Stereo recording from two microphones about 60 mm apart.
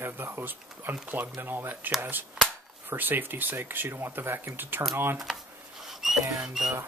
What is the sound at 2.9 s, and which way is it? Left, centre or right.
Speech, right.